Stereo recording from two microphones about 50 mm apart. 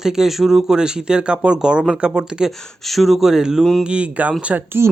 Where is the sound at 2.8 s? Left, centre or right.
Centre.